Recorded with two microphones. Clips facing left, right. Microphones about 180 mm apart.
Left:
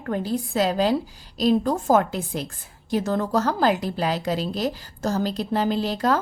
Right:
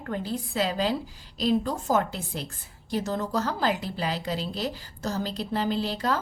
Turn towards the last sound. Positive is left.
turn(degrees=45)  # may be behind; listen again after turning